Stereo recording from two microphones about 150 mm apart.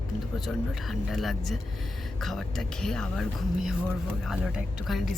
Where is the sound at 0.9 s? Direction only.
Centre (ahead or behind).